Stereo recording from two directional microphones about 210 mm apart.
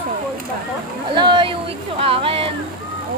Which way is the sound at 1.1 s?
20° right (ahead or behind).